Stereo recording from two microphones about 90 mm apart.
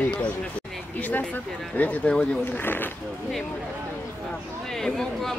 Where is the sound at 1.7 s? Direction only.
15° left (ahead or behind).